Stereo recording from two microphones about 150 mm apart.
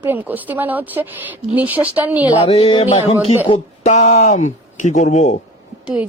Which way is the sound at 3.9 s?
50° left (ahead or behind).